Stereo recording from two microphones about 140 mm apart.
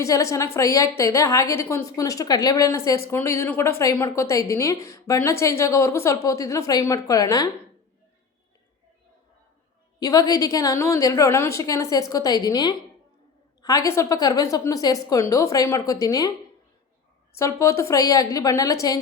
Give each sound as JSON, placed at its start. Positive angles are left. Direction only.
{"t": 0.0, "sound": "a woman's voice", "side_deg": 20}
{"t": 10.0, "sound": "a woman's voice", "side_deg": 25}
{"t": 17.3, "sound": "a woman's voice", "side_deg": 20}